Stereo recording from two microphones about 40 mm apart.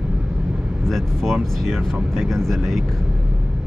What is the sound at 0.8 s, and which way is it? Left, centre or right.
Speech, centre.